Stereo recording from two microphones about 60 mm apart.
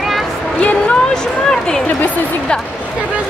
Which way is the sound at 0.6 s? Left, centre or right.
Centre.